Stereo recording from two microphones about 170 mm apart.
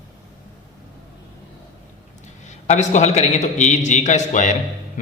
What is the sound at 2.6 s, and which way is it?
A man's voice, 45° left (ahead or behind).